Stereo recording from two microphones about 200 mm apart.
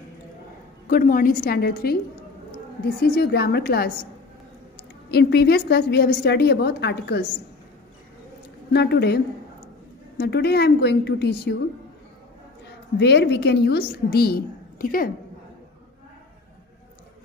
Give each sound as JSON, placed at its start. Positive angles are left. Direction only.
{"t": 0.8, "sound": "a woman's voice", "side_deg": 45}
{"t": 3.0, "sound": "a woman's voice", "side_deg": 55}
{"t": 5.1, "sound": "a woman's voice", "side_deg": 55}
{"t": 8.7, "sound": "a woman's voice", "side_deg": 55}
{"t": 13.0, "sound": "a woman's voice", "side_deg": 55}